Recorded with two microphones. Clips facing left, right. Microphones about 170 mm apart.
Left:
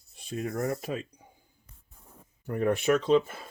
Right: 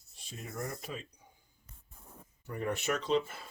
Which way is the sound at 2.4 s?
60° left (ahead or behind).